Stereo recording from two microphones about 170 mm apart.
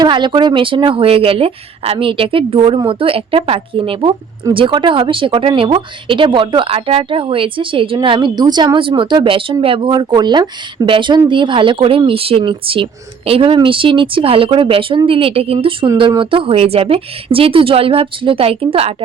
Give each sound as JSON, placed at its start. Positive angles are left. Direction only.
{"t": 0.0, "sound": "speech", "side_deg": -25}